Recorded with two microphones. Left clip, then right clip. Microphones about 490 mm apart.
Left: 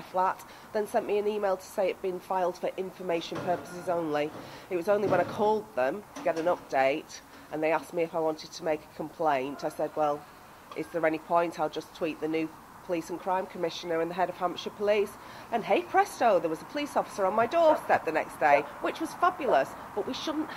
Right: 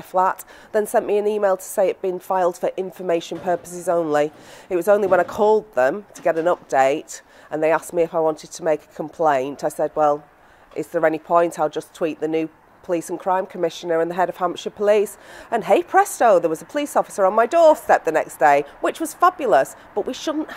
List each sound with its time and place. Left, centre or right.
0.1 s a woman's voice: right